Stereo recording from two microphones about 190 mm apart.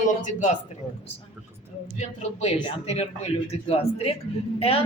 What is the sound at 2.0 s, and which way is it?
Speech, 35° left (ahead or behind).